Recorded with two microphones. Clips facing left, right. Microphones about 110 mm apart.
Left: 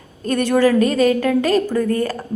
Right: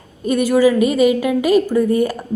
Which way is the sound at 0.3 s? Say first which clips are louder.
Right 2 dB; 10° right (ahead or behind).